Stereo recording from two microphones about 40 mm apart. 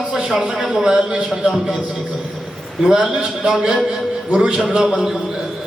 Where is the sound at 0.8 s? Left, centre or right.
Centre.